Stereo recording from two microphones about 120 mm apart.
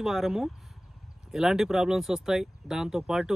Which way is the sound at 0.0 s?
Centre (ahead or behind).